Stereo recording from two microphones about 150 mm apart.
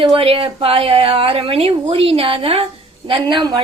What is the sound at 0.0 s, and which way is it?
A woman's voice, 35° right (ahead or behind).